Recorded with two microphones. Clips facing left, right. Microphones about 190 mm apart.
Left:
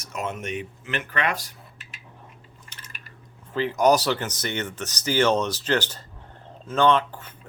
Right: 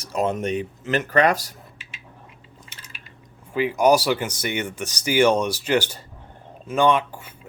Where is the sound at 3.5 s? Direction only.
10° right (ahead or behind).